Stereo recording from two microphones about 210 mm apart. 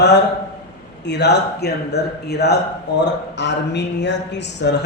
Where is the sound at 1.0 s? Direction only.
55° left (ahead or behind).